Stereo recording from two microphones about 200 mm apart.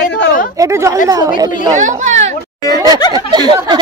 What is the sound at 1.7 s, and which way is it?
Speech, 40° right (ahead or behind).